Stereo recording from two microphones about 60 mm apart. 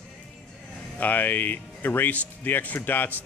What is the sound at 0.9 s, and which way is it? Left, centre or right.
Speech, left.